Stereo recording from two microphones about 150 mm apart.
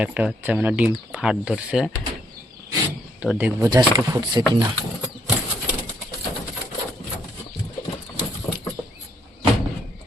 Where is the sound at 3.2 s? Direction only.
10° right (ahead or behind).